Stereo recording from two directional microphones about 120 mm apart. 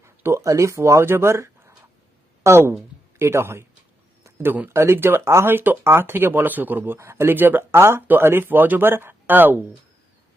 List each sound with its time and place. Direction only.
0.0 s speech: 20° right (ahead or behind)